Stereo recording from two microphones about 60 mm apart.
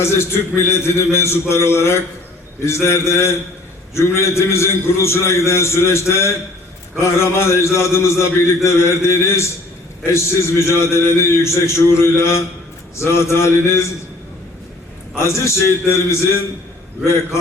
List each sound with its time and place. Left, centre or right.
0.0 s a man's voice: left
15.2 s a man's voice: left